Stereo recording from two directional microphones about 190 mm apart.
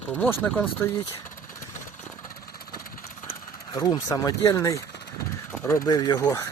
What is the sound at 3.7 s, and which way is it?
Speech, 20° left (ahead or behind).